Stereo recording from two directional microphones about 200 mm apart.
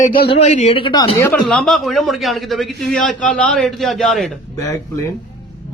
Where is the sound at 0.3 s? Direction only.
30° left (ahead or behind).